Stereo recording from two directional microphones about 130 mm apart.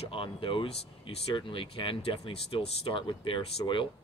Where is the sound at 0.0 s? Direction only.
45° left (ahead or behind).